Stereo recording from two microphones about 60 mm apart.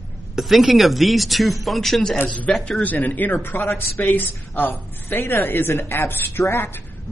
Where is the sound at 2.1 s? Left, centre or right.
Left.